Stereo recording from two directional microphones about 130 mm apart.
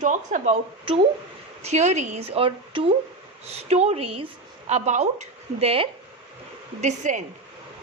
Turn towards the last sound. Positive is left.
turn(degrees=-70)  # may be behind; listen again after turning